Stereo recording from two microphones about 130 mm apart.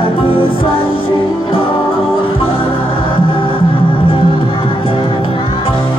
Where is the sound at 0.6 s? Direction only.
45° left (ahead or behind).